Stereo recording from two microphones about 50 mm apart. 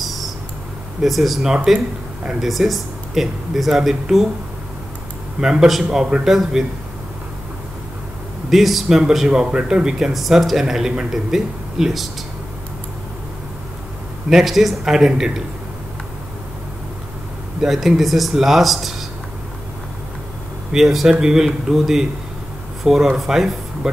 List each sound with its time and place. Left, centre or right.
1.0 s speech: centre
1.5 s speech: centre
2.4 s speech: centre
5.4 s speech: centre
8.5 s speech: centre
10.1 s speech: centre
14.3 s speech: centre
17.6 s speech: centre
20.7 s speech: centre